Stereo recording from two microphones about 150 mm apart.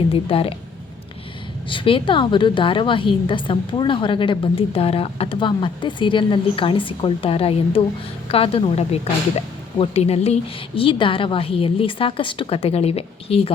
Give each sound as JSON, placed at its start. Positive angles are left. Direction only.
{"t": 0.1, "sound": "a woman's voice", "side_deg": 40}
{"t": 1.7, "sound": "a woman's voice", "side_deg": 35}